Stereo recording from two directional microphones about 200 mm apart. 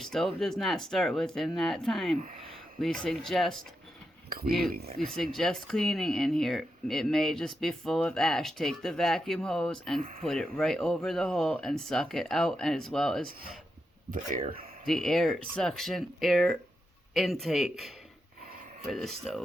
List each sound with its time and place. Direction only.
0.0 s speech: centre (ahead or behind)
4.3 s speech: 50° right (ahead or behind)
4.9 s speech: centre (ahead or behind)
10.0 s speech: 45° right (ahead or behind)
10.2 s speech: centre (ahead or behind)
14.1 s speech: 45° right (ahead or behind)
14.8 s speech: centre (ahead or behind)